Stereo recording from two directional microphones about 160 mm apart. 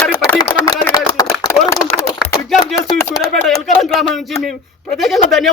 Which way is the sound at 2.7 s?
20° left (ahead or behind).